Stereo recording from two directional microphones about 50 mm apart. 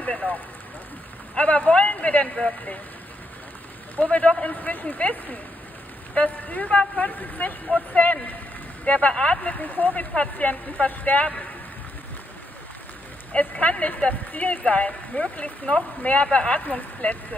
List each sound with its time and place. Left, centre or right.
0.0 s speech: left
1.4 s speech: left
3.9 s speech: left
4.6 s speech: left
13.3 s speech: left